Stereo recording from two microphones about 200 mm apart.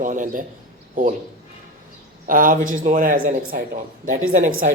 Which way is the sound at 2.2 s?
40° right (ahead or behind).